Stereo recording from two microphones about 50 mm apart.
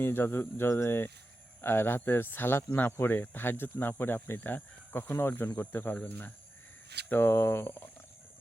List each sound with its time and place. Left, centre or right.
0.0 s speech: left
7.1 s speech: left